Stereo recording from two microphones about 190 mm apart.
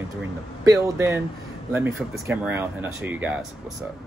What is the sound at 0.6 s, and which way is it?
Speech, 15° right (ahead or behind).